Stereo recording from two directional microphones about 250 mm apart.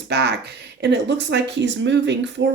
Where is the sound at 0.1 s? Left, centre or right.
Right.